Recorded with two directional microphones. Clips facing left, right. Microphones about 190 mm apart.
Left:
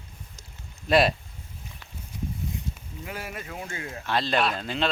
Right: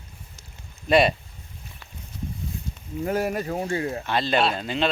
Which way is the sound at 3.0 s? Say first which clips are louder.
Right 12 dB; 45° right (ahead or behind).